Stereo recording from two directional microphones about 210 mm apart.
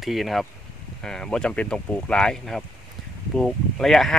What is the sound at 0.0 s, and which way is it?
Speech, centre (ahead or behind).